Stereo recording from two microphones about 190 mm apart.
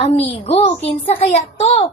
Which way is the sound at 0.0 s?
35° left (ahead or behind).